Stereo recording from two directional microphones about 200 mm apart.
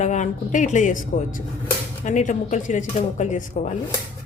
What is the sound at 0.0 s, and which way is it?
Speech, 35° left (ahead or behind).